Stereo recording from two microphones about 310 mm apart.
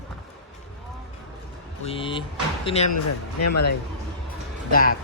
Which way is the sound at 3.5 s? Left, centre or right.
Left.